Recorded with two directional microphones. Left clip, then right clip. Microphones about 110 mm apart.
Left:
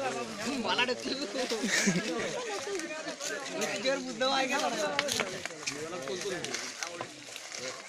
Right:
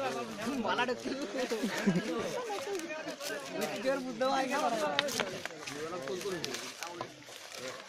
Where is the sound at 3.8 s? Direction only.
55° right (ahead or behind).